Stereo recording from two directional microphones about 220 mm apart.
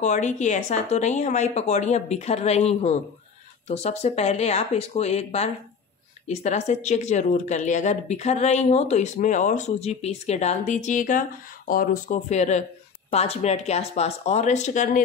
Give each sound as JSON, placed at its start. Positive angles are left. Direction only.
{"t": 0.0, "sound": "speech", "side_deg": 35}